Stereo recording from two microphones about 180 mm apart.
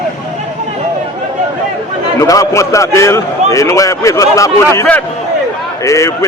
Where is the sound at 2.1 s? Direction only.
20° left (ahead or behind).